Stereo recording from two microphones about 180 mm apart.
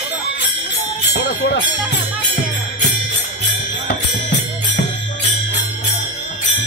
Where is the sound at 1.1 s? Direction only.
75° left (ahead or behind).